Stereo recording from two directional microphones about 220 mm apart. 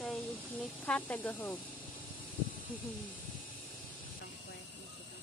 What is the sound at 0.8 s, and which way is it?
Speech, 5° left (ahead or behind).